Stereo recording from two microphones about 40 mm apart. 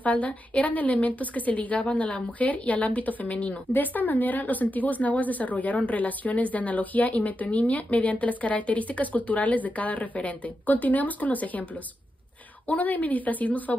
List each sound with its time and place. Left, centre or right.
0.0 s speech: left
12.6 s a woman's voice: left